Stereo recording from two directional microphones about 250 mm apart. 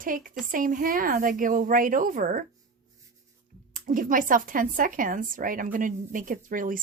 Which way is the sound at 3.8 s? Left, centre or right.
Right.